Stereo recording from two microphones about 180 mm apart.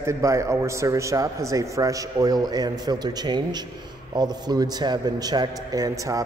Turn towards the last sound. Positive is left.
turn(degrees=-20)  # may be behind; listen again after turning